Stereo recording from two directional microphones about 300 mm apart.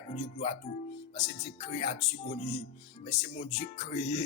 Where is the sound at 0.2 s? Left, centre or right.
Left.